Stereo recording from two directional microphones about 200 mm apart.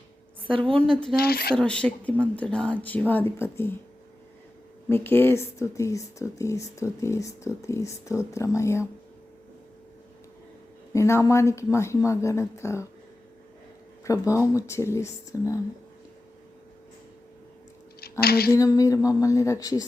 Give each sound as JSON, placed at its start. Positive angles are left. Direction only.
{"t": 0.5, "sound": "a woman's voice", "side_deg": -25}
{"t": 1.1, "sound": "speech", "side_deg": 50}
{"t": 1.5, "sound": "speech", "side_deg": 5}
{"t": 4.9, "sound": "speech", "side_deg": 10}
{"t": 10.9, "sound": "speech", "side_deg": 15}
{"t": 14.0, "sound": "speech", "side_deg": 15}
{"t": 18.2, "sound": "speech", "side_deg": 50}
{"t": 18.5, "sound": "speech", "side_deg": 15}